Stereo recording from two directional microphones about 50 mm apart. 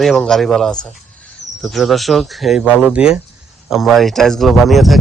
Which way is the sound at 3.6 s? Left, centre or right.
Centre.